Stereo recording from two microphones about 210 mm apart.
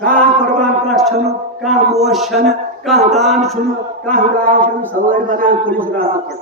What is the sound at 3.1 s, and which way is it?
Speech, centre (ahead or behind).